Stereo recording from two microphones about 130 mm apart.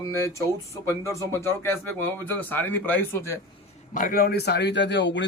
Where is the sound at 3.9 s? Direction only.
90° left.